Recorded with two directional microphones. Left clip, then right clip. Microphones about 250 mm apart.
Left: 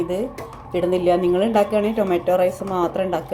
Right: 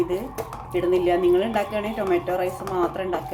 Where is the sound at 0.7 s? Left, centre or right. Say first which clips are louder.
Left 3 dB; left.